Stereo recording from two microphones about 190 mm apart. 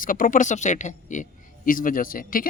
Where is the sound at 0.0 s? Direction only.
45° left (ahead or behind).